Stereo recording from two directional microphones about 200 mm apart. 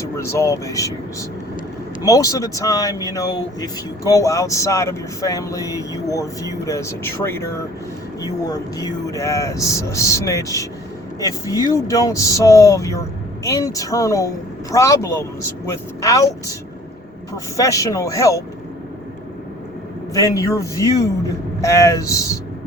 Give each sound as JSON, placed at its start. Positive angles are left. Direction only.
{"t": 0.2, "sound": "speech", "side_deg": 15}
{"t": 2.0, "sound": "speech", "side_deg": 15}
{"t": 17.6, "sound": "speech", "side_deg": 15}
{"t": 20.1, "sound": "speech", "side_deg": 15}